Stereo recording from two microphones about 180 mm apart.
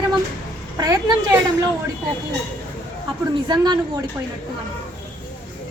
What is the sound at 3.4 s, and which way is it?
Speech, 20° right (ahead or behind).